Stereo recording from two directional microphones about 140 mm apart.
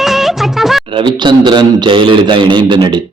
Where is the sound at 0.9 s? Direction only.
35° right (ahead or behind).